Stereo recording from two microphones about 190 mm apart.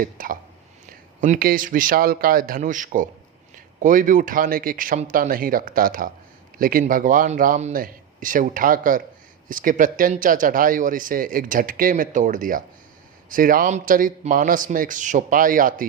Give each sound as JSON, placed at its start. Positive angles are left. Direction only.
{"t": 0.0, "sound": "speech", "side_deg": -45}